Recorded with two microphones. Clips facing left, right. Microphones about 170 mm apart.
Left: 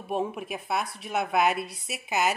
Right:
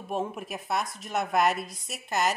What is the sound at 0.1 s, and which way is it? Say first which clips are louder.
A woman's voice: left 2 dB; centre (ahead or behind).